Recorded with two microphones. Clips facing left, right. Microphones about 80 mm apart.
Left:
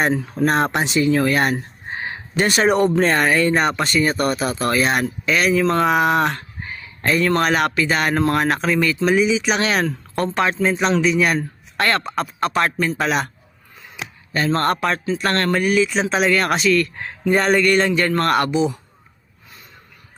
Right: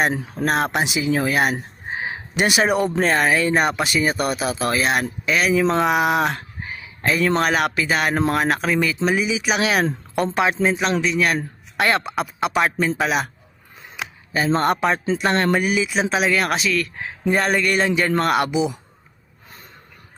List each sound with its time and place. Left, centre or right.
0.1 s a man's voice: centre
0.4 s speech: centre
1.5 s a sound: centre
3.0 s speech: centre
11.3 s a man's voice: centre
14.3 s a man's voice: centre